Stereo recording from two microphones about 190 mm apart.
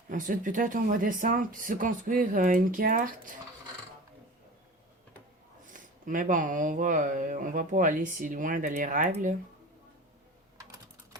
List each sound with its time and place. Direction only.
0.1 s speech: 45° right (ahead or behind)
5.6 s speech: 45° right (ahead or behind)